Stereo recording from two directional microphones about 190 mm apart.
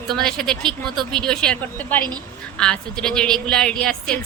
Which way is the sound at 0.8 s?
25° right (ahead or behind).